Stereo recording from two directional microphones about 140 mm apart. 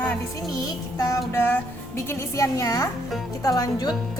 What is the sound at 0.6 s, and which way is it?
A woman's voice, 25° left (ahead or behind).